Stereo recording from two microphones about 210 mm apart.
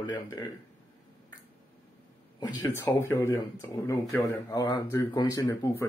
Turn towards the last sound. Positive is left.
turn(degrees=10)  # may be behind; listen again after turning